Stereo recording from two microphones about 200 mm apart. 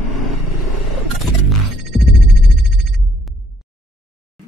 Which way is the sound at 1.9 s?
Centre (ahead or behind).